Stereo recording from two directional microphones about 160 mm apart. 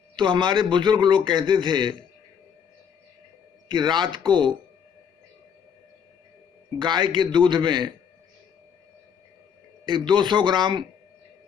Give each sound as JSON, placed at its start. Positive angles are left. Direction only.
{"t": 0.1, "sound": "a man's voice", "side_deg": -30}
{"t": 3.6, "sound": "a man's voice", "side_deg": -30}
{"t": 6.8, "sound": "a man's voice", "side_deg": -30}
{"t": 9.8, "sound": "a man's voice", "side_deg": -30}